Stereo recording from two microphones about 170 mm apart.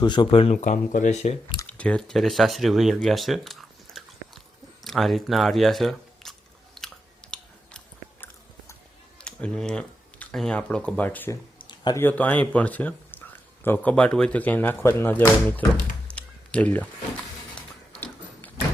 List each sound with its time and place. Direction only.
0.0 s speech: 30° left (ahead or behind)
0.5 s speech: 45° left (ahead or behind)
1.6 s speech: 5° left (ahead or behind)
6.7 s chewing: 5° left (ahead or behind)
9.2 s speech: 5° left (ahead or behind)
11.7 s a sound: 25° left (ahead or behind)
11.9 s speech: 10° left (ahead or behind)
16.1 s a sound: 5° left (ahead or behind)